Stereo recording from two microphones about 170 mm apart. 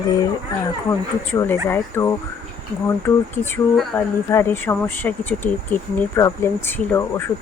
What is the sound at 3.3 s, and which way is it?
Speech, 15° left (ahead or behind).